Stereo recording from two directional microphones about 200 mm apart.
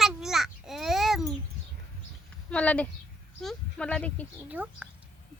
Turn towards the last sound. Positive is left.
turn(degrees=-5)  # may be behind; listen again after turning